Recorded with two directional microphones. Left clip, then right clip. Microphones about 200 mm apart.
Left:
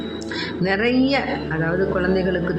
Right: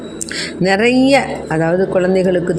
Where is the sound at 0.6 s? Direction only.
35° right (ahead or behind).